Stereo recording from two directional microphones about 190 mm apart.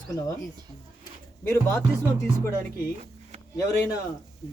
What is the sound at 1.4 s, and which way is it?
Speech, 15° left (ahead or behind).